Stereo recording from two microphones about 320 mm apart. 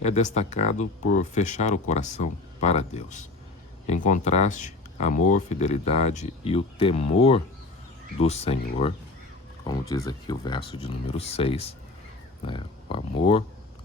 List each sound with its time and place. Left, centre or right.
0.0 s speech: left